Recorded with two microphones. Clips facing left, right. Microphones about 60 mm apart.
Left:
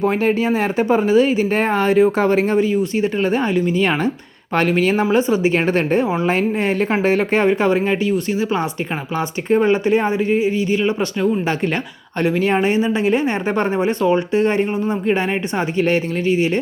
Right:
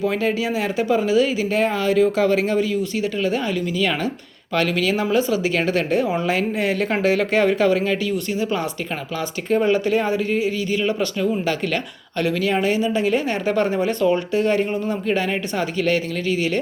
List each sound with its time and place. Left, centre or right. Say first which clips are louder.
0.0 s speech: left 4 dB; left